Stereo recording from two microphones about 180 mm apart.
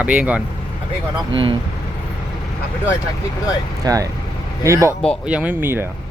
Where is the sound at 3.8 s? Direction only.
20° right (ahead or behind).